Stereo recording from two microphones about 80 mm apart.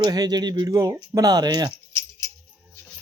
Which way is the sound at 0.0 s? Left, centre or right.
Right.